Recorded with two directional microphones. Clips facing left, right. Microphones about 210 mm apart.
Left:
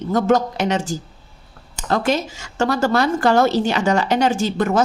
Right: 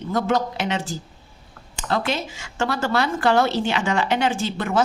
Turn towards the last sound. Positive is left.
turn(degrees=40)  # may be behind; listen again after turning